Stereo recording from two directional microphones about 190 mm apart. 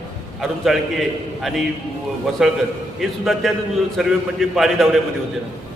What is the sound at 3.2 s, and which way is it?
A man's voice, centre (ahead or behind).